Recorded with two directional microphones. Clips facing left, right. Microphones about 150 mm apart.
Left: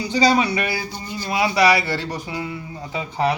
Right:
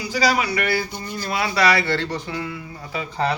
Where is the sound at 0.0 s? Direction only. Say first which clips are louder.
Left 3 dB; 25° left (ahead or behind).